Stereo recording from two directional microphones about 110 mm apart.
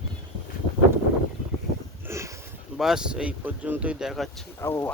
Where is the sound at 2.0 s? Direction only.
25° right (ahead or behind).